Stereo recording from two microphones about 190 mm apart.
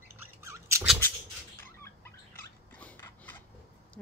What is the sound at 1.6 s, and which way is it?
Bird, 15° left (ahead or behind).